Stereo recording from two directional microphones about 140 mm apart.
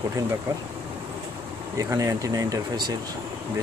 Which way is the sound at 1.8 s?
25° right (ahead or behind).